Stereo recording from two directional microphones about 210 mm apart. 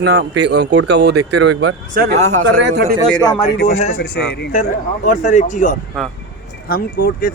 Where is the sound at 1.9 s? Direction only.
50° right (ahead or behind).